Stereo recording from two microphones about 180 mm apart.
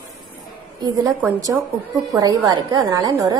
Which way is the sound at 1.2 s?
15° right (ahead or behind).